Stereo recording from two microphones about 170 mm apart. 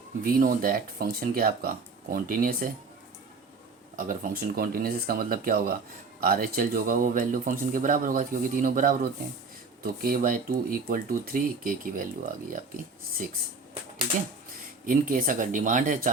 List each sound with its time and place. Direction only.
0.3 s speech: 55° right (ahead or behind)
3.9 s speech: 50° right (ahead or behind)
14.8 s speech: 50° right (ahead or behind)